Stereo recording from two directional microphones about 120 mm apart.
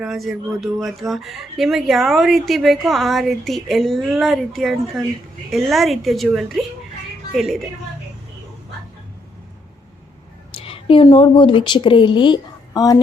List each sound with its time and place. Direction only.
0.0 s speech: 5° right (ahead or behind)
10.6 s a woman's voice: 50° left (ahead or behind); by 13.0 s 30° left (ahead or behind)